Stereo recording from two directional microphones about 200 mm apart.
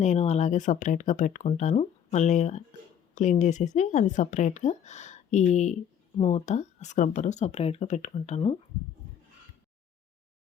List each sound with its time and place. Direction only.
0.0 s speech: 35° left (ahead or behind)